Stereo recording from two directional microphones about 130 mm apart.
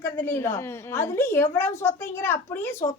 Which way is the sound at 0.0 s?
20° left (ahead or behind).